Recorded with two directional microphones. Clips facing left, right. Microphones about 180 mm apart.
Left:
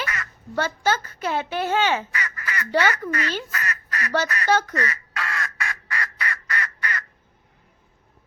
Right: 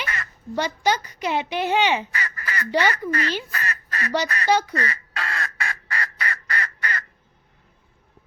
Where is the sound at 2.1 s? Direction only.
35° right (ahead or behind).